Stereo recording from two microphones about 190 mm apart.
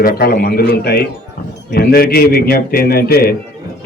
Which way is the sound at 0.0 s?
55° left (ahead or behind).